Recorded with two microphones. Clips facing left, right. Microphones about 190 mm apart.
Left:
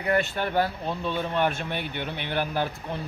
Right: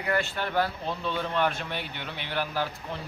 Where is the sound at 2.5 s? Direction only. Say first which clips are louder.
Left 3 dB; 20° left (ahead or behind).